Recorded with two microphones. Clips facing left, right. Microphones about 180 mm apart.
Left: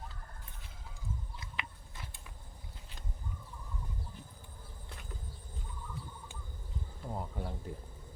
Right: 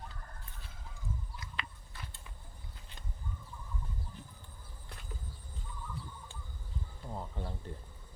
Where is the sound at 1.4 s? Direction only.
20° left (ahead or behind).